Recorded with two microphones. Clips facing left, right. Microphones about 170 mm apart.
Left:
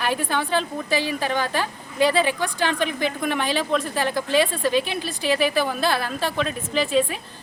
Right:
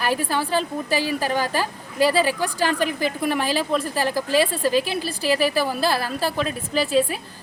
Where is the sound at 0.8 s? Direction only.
40° right (ahead or behind).